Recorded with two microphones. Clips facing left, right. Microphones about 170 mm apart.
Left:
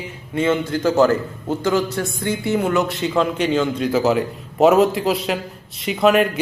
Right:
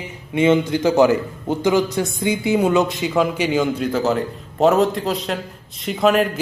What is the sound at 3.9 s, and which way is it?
A man's voice, 10° left (ahead or behind).